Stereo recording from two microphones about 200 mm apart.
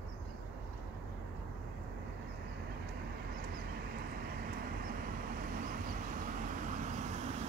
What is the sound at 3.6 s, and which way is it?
Vehicle, 50° right (ahead or behind).